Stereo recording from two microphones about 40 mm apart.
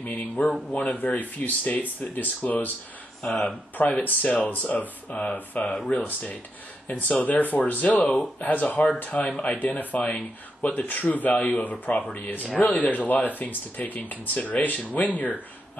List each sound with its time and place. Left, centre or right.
0.0 s speech: left
3.2 s speech: centre
3.7 s speech: left
7.2 s speech: left
11.3 s speech: left
11.6 s speech: left